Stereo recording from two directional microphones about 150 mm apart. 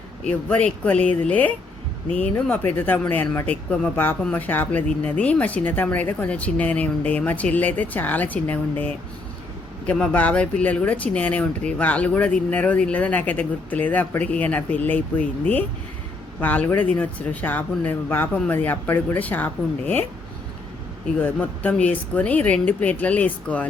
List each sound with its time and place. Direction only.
0.3 s speech: 10° left (ahead or behind)
21.2 s speech: 10° left (ahead or behind)